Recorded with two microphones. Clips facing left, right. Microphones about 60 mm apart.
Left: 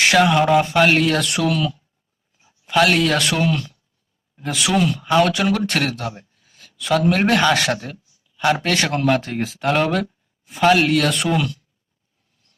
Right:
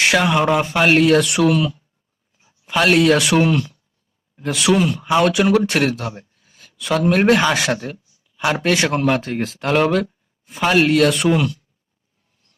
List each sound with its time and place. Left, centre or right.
0.0 s speech: centre
3.3 s speech: right
4.4 s speech: centre